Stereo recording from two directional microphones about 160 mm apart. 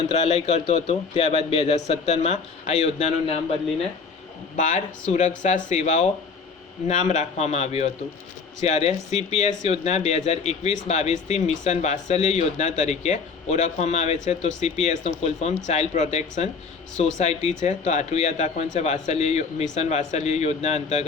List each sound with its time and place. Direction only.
0.1 s speech: 45° left (ahead or behind)
4.5 s speech: 50° left (ahead or behind)